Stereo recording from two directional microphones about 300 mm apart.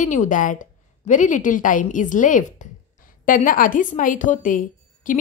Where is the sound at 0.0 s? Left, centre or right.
Left.